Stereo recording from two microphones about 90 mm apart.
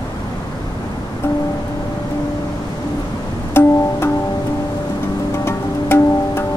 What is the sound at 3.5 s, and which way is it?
Music, 25° left (ahead or behind).